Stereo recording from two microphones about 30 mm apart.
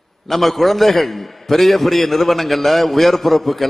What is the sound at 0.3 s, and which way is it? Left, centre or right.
A man's voice, centre.